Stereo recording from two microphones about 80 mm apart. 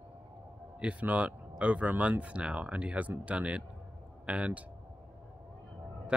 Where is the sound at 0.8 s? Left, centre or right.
Centre.